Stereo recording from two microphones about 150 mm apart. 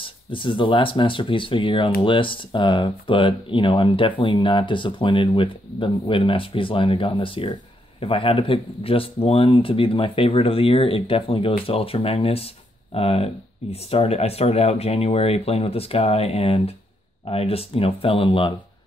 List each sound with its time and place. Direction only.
0.0 s speech: 35° left (ahead or behind)